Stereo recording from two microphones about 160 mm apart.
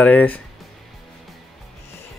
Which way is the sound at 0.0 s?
10° left (ahead or behind).